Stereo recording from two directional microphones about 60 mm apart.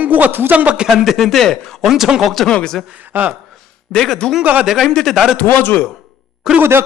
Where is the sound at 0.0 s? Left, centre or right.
Right.